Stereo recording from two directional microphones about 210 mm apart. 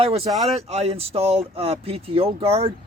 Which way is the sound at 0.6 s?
30° right (ahead or behind).